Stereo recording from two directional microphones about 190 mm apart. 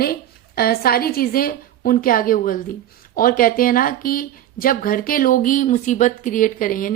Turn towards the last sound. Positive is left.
turn(degrees=45)  # may be behind; listen again after turning